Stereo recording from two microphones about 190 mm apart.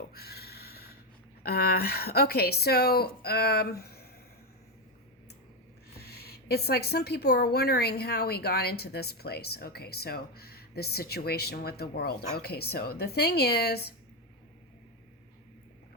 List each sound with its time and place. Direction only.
0.1 s a sound: 55° left (ahead or behind)
1.5 s speech: 55° left (ahead or behind)
6.0 s speech: 55° left (ahead or behind)